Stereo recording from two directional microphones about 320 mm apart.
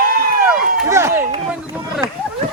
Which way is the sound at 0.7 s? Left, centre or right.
Centre.